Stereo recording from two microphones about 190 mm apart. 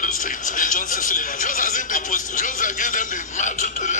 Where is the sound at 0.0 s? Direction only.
45° left (ahead or behind).